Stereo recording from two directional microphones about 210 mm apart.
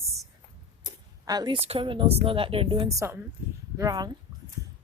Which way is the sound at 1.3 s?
20° right (ahead or behind).